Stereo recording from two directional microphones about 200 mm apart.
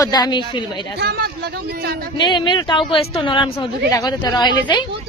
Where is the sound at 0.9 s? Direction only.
50° right (ahead or behind).